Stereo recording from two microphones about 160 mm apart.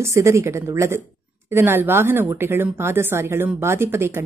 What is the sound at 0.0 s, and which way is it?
A woman's voice, 20° right (ahead or behind).